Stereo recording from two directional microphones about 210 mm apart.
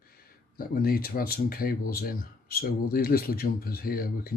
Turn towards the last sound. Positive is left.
turn(degrees=45)  # may be behind; listen again after turning